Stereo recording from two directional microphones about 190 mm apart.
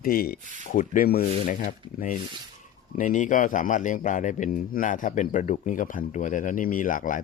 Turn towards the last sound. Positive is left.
turn(degrees=45)  # may be behind; listen again after turning